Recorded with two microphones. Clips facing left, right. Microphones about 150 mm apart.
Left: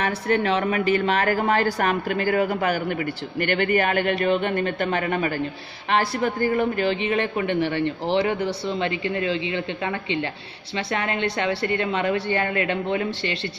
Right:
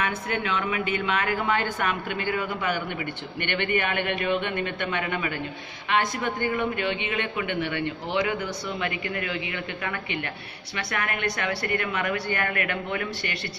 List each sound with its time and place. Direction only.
0.0 s a man's voice: 35° left (ahead or behind)